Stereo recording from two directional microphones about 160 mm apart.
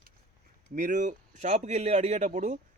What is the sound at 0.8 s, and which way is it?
A man's voice, 50° right (ahead or behind).